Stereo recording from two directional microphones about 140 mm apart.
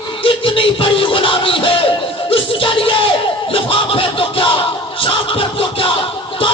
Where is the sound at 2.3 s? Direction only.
40° left (ahead or behind).